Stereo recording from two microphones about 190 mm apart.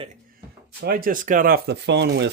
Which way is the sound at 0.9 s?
50° right (ahead or behind).